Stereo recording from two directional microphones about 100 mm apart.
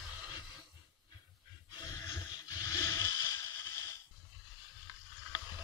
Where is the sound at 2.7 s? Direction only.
25° left (ahead or behind).